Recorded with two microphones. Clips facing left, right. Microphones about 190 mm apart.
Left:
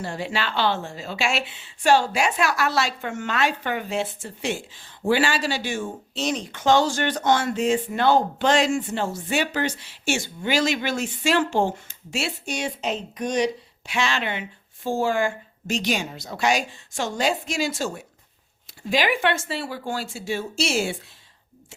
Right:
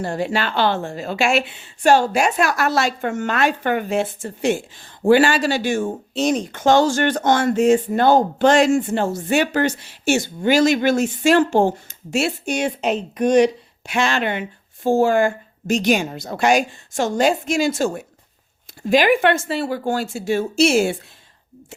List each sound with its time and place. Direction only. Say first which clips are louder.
0.0 s a woman's voice: right 6 dB; 45° right (ahead or behind)